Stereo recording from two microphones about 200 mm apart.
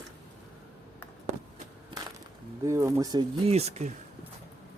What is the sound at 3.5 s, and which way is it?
Speech, 30° right (ahead or behind).